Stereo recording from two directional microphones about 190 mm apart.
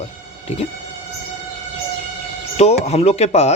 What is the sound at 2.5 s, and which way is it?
Speech, 35° left (ahead or behind).